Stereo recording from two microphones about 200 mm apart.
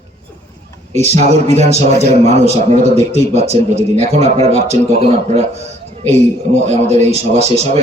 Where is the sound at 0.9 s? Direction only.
35° right (ahead or behind).